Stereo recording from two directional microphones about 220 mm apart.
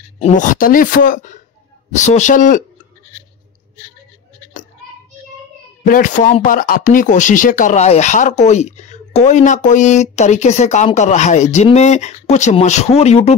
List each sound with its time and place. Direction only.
0.2 s speech: 35° left (ahead or behind)
5.9 s speech: 35° left (ahead or behind)